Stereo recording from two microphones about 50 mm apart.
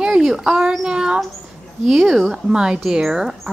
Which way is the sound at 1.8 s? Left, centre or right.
Centre.